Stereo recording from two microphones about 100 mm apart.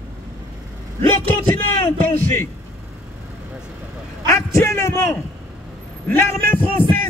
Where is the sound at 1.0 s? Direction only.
20° left (ahead or behind).